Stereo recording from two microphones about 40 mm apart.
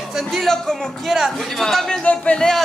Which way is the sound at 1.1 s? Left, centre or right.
Centre.